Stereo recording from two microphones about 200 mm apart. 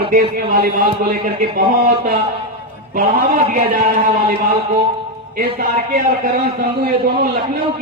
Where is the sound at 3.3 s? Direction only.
50° right (ahead or behind).